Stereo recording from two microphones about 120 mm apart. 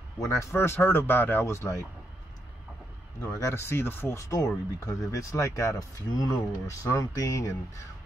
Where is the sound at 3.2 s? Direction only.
25° left (ahead or behind).